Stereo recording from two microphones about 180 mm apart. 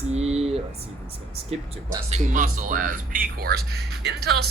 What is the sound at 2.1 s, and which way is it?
Speech, 45° right (ahead or behind).